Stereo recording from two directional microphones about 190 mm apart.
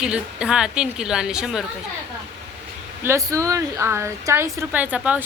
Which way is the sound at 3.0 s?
15° right (ahead or behind).